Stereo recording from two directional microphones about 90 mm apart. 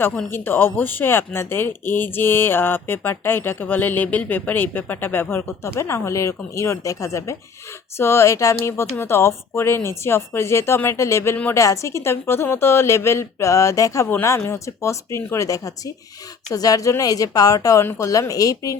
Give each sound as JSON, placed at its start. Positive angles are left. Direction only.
{"t": 0.3, "sound": "a woman's voice", "side_deg": 25}